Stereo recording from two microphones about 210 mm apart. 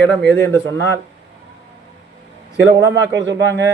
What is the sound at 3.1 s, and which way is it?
Speech, 60° right (ahead or behind).